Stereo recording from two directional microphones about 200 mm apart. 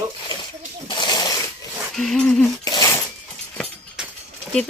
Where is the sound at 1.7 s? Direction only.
Centre (ahead or behind).